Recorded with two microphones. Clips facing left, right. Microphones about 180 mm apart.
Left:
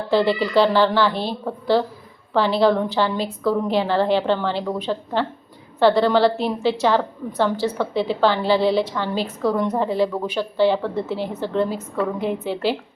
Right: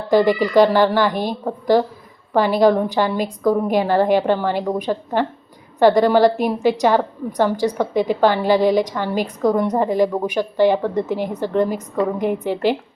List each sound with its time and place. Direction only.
0.1 s a woman's voice: 15° right (ahead or behind)